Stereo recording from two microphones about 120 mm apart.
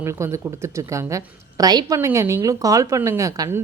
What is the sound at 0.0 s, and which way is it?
A woman's voice, 25° right (ahead or behind).